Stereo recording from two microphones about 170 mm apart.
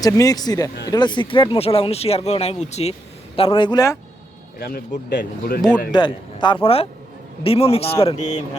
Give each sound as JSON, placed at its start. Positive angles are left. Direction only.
{"t": 0.0, "sound": "speech", "side_deg": 20}
{"t": 4.6, "sound": "speech", "side_deg": 60}
{"t": 5.9, "sound": "speech", "side_deg": 25}